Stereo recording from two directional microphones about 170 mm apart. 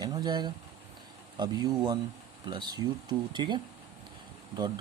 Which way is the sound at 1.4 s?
25° right (ahead or behind).